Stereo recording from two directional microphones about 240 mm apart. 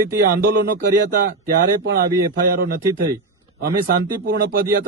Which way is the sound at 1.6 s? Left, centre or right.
Right.